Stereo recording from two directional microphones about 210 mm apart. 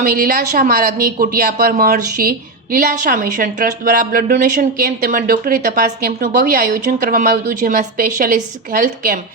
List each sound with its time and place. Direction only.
0.0 s a woman's voice: 45° right (ahead or behind)